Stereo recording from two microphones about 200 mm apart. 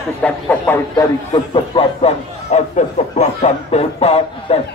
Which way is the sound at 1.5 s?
30° left (ahead or behind).